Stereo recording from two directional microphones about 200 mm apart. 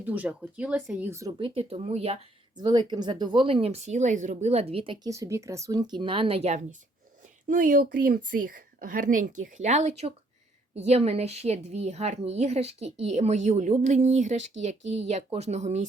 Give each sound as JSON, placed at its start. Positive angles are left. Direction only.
{"t": 0.0, "sound": "speech", "side_deg": -5}
{"t": 1.4, "sound": "a woman's voice", "side_deg": -30}